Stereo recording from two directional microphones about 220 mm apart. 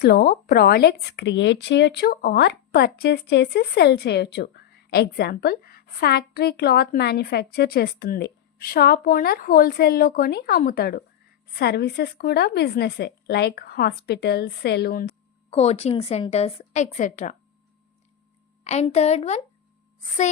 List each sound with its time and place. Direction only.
0.0 s speech: 45° left (ahead or behind)
15.4 s a woman's voice: 30° left (ahead or behind)
18.6 s a woman's voice: 30° left (ahead or behind)